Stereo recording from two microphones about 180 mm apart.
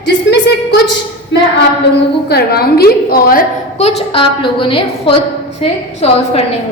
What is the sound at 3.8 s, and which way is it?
A woman's voice, 35° left (ahead or behind).